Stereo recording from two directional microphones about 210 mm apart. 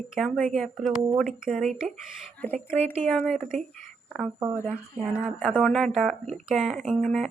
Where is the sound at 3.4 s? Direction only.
35° right (ahead or behind).